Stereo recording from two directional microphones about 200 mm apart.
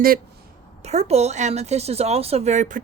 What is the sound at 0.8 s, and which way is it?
A woman's voice, 30° right (ahead or behind).